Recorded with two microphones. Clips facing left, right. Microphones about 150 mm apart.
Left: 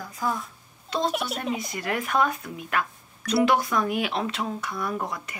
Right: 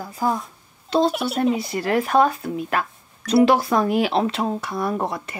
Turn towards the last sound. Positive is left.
turn(degrees=-30)  # may be behind; listen again after turning